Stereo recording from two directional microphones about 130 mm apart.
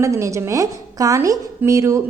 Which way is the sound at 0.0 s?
25° right (ahead or behind).